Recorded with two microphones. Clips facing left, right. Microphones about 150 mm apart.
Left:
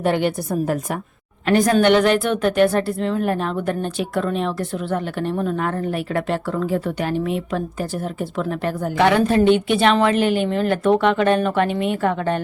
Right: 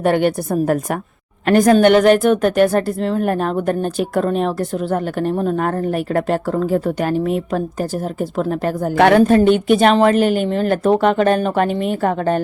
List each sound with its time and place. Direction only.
0.0 s a woman's voice: 50° right (ahead or behind)
9.0 s a woman's voice: 50° right (ahead or behind)